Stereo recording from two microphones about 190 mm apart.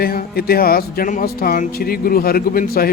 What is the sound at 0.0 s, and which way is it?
Speech, 50° left (ahead or behind).